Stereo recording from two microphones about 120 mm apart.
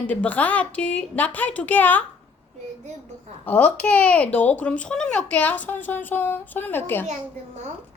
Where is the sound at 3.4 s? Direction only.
15° left (ahead or behind).